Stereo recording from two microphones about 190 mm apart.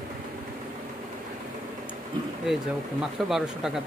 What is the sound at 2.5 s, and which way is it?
Speech, 5° right (ahead or behind).